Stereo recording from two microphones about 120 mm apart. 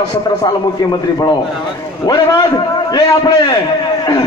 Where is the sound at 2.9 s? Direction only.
35° left (ahead or behind).